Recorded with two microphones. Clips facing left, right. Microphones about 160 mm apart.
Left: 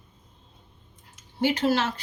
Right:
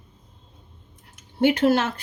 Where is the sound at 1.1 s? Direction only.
55° right (ahead or behind).